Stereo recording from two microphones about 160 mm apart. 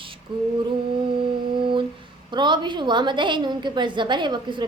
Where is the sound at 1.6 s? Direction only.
30° right (ahead or behind).